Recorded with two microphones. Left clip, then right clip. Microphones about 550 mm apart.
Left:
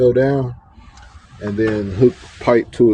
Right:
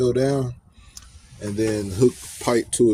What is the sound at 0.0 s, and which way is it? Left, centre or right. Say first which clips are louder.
Speech: left 7 dB; right.